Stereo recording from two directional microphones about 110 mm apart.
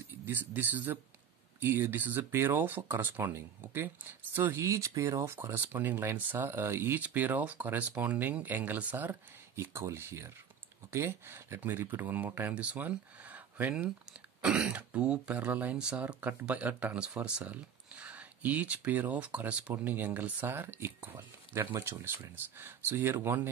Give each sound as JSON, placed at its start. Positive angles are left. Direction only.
{"t": 0.2, "sound": "speech", "side_deg": -15}